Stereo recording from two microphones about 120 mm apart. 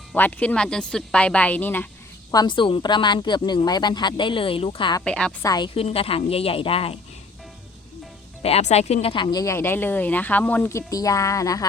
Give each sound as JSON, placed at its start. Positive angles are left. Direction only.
{"t": 0.1, "sound": "speech", "side_deg": 10}
{"t": 2.3, "sound": "speech", "side_deg": 35}
{"t": 5.0, "sound": "speech", "side_deg": 10}
{"t": 5.4, "sound": "speech", "side_deg": 35}
{"t": 5.7, "sound": "speech", "side_deg": 55}
{"t": 8.4, "sound": "speech", "side_deg": 60}
{"t": 9.2, "sound": "speech", "side_deg": 30}